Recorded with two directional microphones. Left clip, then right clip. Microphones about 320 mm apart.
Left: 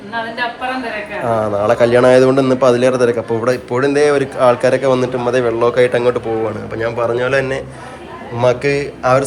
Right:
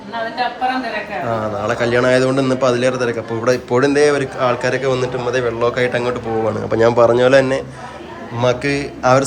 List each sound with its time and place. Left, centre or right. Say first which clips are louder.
1.3 s a man's voice: left 7 dB; centre